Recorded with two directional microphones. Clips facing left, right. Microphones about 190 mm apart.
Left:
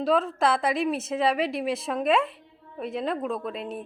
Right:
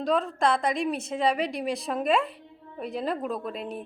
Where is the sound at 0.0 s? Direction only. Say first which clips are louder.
Left 2 dB; centre (ahead or behind).